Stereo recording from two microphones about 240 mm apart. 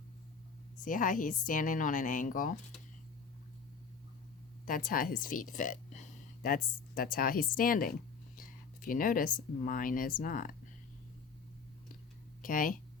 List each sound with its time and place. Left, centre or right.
0.8 s a woman's voice: left
4.6 s speech: left
12.4 s speech: left